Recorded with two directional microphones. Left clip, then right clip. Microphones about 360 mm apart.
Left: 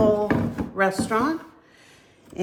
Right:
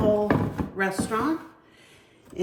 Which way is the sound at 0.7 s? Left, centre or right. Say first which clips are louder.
Left 5 dB; left.